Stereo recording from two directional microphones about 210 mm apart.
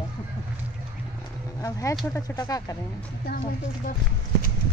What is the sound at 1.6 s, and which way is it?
A woman's voice, 15° left (ahead or behind).